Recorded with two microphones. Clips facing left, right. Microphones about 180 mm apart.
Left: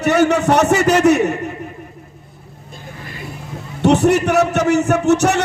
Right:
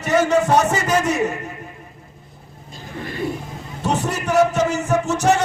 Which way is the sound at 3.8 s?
70° left (ahead or behind).